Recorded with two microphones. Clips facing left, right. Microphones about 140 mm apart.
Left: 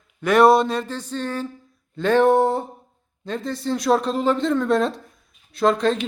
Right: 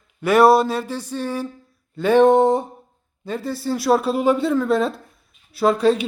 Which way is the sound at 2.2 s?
20° right (ahead or behind).